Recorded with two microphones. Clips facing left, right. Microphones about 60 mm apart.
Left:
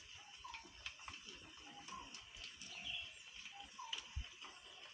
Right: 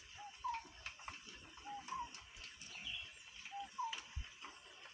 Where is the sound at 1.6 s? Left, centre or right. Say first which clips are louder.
Right 12 dB; right.